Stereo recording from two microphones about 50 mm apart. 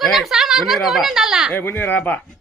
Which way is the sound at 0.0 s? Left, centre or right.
Centre.